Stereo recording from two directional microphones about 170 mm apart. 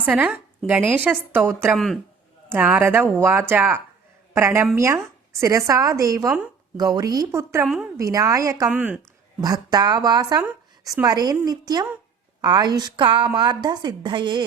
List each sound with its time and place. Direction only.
0.0 s a woman's voice: 10° right (ahead or behind)
1.7 s speech: centre (ahead or behind)
2.5 s a woman's voice: 10° right (ahead or behind)
8.7 s a woman's voice: 5° right (ahead or behind)
9.4 s a woman's voice: 25° right (ahead or behind)